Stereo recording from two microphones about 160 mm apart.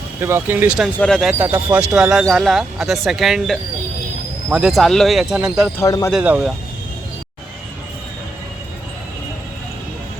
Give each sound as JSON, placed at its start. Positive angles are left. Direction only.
{"t": 0.2, "sound": "speech", "side_deg": -15}
{"t": 0.9, "sound": "speech", "side_deg": 5}
{"t": 1.4, "sound": "speech", "side_deg": -15}
{"t": 5.8, "sound": "speech", "side_deg": 20}
{"t": 6.1, "sound": "speech", "side_deg": -5}